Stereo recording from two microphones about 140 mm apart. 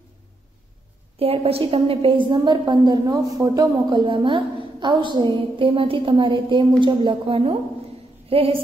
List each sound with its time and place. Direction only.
1.2 s a woman's voice: 45° right (ahead or behind)